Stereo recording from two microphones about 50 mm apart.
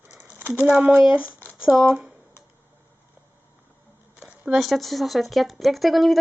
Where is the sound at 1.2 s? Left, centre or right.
Left.